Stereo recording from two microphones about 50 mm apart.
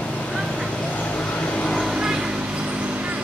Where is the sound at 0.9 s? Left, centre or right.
Left.